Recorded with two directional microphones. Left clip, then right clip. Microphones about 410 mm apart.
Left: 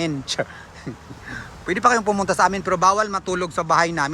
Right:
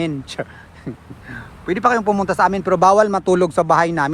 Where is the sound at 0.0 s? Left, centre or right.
Centre.